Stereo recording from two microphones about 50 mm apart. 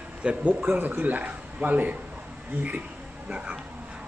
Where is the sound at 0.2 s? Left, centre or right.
Right.